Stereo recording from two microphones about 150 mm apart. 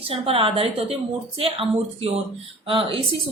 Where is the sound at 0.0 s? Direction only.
40° right (ahead or behind).